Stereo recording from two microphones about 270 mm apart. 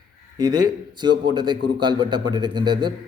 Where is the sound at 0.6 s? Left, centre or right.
Centre.